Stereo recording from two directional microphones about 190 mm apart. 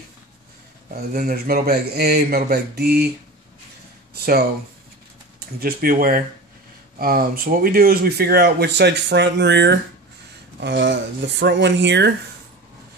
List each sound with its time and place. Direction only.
1.1 s speech: 50° right (ahead or behind)
4.1 s a sound: 55° right (ahead or behind)
5.6 s speech: 50° right (ahead or behind); by 12.1 s 65° right (ahead or behind)